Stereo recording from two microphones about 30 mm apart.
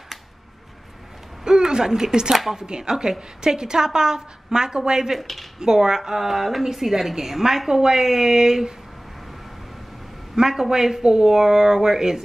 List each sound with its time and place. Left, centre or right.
1.4 s a sound: right
2.5 s a woman's voice: right
5.2 s speech: centre
5.6 s a woman's voice: right
10.4 s a woman's voice: right